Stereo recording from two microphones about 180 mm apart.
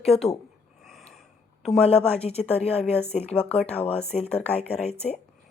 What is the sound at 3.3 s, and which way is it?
Speech, 5° left (ahead or behind).